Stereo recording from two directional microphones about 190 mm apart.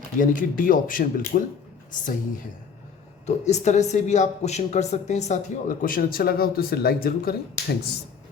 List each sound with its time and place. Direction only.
0.2 s speech: 45° left (ahead or behind)
3.2 s speech: 35° left (ahead or behind)